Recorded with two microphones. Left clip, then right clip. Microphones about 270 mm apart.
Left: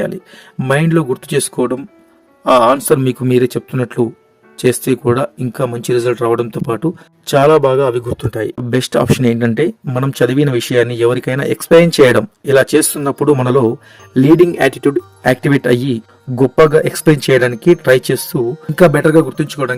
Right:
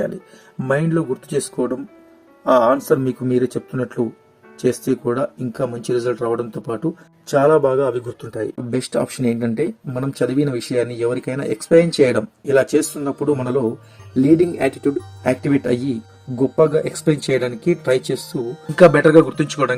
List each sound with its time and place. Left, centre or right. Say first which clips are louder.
0.6 s speech: left 5 dB; left
18.4 s speech: left 9 dB; centre
18.8 s speech: left 1 dB; left